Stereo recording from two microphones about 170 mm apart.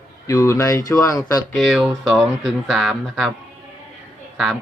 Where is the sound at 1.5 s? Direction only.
Centre (ahead or behind).